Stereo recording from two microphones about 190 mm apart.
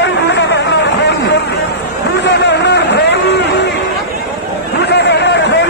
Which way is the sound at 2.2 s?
65° left (ahead or behind).